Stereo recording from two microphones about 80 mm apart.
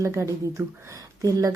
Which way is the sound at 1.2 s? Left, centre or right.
Right.